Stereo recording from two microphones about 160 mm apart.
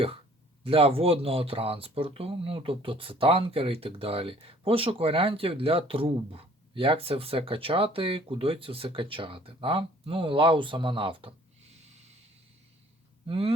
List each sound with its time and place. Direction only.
0.6 s speech: 35° right (ahead or behind)
13.2 s speech: 35° right (ahead or behind)